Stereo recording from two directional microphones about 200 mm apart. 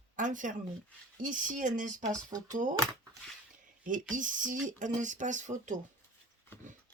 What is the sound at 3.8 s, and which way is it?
Speech, 40° right (ahead or behind).